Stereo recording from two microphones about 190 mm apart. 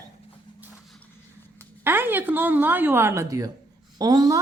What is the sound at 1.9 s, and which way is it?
A woman's voice, 10° right (ahead or behind).